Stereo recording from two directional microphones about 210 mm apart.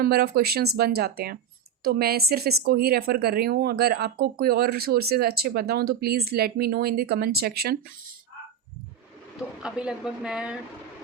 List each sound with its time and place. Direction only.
0.0 s speech: 45° right (ahead or behind)
9.6 s speech: 5° right (ahead or behind)